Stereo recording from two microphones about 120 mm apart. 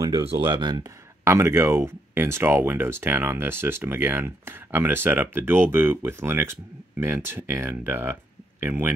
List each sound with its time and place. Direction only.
0.4 s speech: 35° right (ahead or behind)
1.2 s speech: 20° right (ahead or behind)